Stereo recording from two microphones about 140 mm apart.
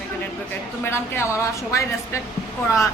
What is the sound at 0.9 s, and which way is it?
Speech, 20° left (ahead or behind).